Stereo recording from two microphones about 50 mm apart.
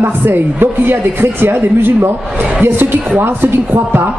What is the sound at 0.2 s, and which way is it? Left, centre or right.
Speech, right.